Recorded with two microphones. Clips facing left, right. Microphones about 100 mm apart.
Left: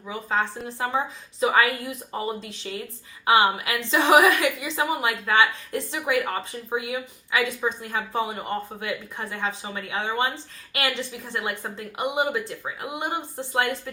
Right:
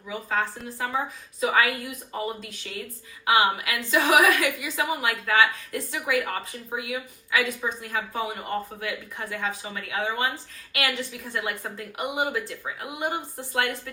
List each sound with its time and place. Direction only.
0.1 s a woman's voice: 25° left (ahead or behind)